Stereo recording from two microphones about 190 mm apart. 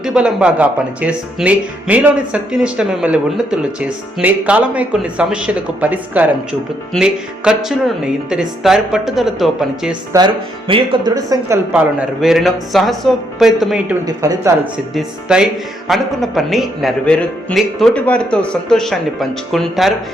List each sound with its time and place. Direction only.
0.0 s speech: 5° right (ahead or behind)
10.1 s speech: 25° right (ahead or behind); by 13.9 s 5° right (ahead or behind)
14.2 s speech: 15° right (ahead or behind)
14.9 s speech: 5° right (ahead or behind)